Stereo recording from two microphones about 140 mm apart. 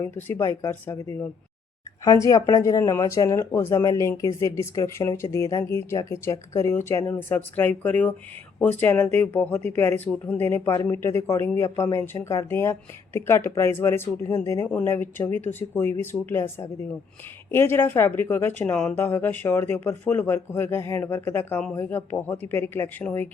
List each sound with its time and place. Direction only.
0.0 s speech: 15° left (ahead or behind)
2.2 s speech: 25° left (ahead or behind)